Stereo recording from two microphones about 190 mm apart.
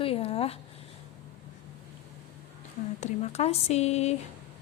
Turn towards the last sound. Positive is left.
turn(degrees=35)  # may be behind; listen again after turning